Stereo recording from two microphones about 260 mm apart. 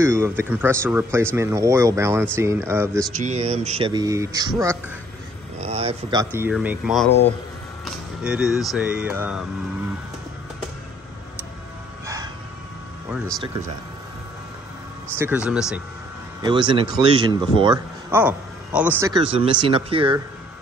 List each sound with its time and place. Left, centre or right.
0.0 s speech: centre
3.2 s speech: right
5.6 s speech: right; by 9.5 s centre
15.1 s speech: centre
16.3 s speech: centre
18.2 s speech: centre